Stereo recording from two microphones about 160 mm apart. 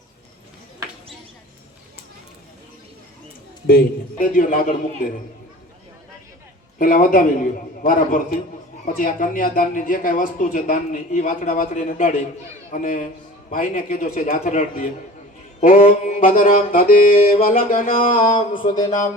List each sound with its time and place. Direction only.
3.7 s speech: 60° left (ahead or behind)
6.7 s speech: 60° left (ahead or behind)
18.3 s a sound: 30° left (ahead or behind)
18.9 s speech: 50° left (ahead or behind)